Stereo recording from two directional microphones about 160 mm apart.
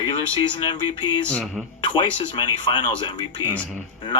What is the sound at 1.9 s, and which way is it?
Speech, 30° left (ahead or behind).